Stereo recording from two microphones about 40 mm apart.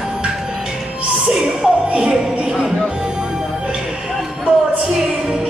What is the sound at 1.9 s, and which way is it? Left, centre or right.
Music, right.